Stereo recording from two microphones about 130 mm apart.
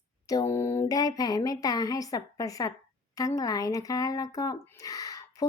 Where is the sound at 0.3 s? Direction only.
25° left (ahead or behind).